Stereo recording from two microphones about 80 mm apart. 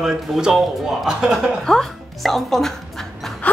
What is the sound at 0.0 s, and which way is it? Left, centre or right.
Speech, centre.